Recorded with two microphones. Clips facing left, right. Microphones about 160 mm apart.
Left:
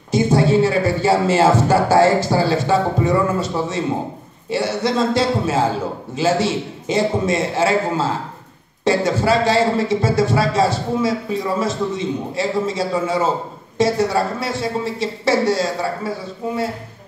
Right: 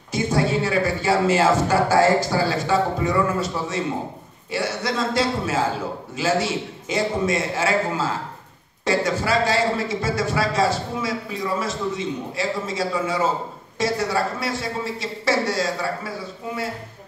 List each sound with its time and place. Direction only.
0.1 s a man's voice: 25° left (ahead or behind)